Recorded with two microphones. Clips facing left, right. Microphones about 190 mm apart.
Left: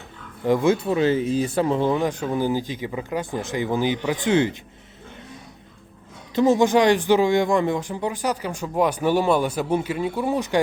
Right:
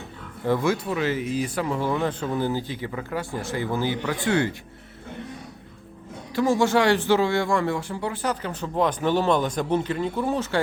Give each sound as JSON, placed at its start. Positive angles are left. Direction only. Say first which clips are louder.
{"t": 0.4, "sound": "speech", "louder": "left 4 dB", "side_deg": 20}
{"t": 6.3, "sound": "speech", "louder": "left 3 dB", "side_deg": 20}